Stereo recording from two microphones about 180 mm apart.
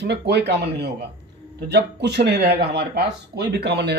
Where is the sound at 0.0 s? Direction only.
70° right (ahead or behind).